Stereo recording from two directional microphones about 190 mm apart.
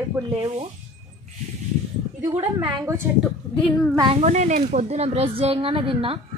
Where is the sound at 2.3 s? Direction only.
30° right (ahead or behind).